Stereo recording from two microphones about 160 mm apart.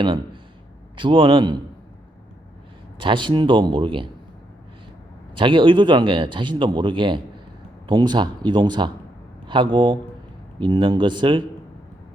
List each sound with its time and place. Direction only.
0.9 s speech: 30° right (ahead or behind)
3.0 s speech: 30° right (ahead or behind)
5.3 s speech: 30° right (ahead or behind)